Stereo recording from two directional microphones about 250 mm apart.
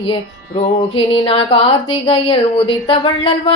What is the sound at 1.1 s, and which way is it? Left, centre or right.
Female singing, left.